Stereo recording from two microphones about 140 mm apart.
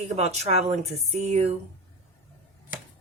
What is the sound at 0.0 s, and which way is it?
Speech, 50° right (ahead or behind).